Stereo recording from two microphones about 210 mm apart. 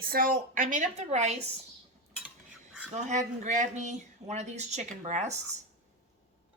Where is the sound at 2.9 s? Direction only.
35° right (ahead or behind).